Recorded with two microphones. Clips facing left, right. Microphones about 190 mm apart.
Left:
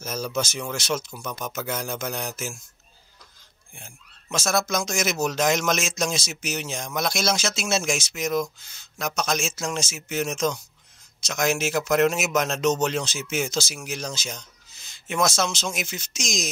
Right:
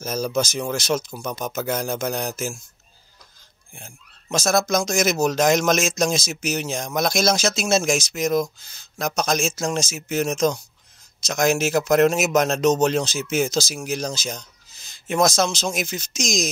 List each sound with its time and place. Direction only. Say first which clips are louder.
0.0 s speech: right 5 dB; 40° right (ahead or behind)
3.7 s speech: right 3 dB; 35° right (ahead or behind)